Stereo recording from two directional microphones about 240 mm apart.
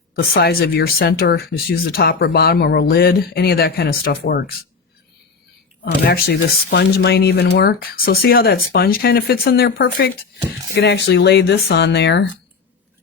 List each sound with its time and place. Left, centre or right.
0.3 s speech: left
5.8 s speech: left